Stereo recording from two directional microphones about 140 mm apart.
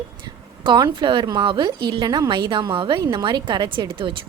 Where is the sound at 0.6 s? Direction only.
35° right (ahead or behind).